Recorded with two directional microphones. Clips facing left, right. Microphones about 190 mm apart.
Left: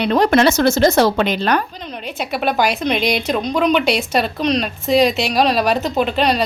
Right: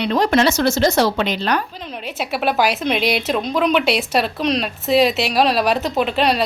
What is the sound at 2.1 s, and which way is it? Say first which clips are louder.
Speech: even; 5° right (ahead or behind).